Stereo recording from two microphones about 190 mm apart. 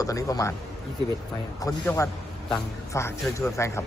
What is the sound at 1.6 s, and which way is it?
Speech, 15° left (ahead or behind).